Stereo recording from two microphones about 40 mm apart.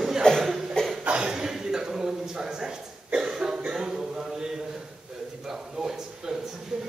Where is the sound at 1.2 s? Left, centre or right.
Centre.